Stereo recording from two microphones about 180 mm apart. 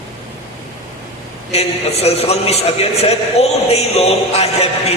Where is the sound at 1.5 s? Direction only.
35° left (ahead or behind).